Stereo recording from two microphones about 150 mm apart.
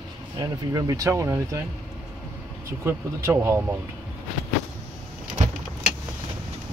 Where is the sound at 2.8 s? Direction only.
15° right (ahead or behind).